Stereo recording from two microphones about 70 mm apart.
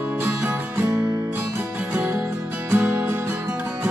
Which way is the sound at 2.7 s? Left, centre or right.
Right.